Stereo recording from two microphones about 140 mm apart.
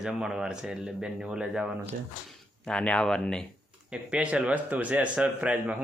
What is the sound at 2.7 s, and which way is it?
Speech, 5° left (ahead or behind).